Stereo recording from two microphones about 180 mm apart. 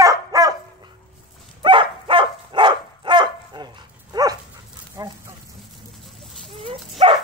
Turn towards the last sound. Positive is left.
turn(degrees=-30)  # may be behind; listen again after turning